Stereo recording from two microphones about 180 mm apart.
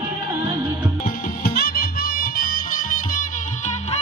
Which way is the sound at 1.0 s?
50° left (ahead or behind).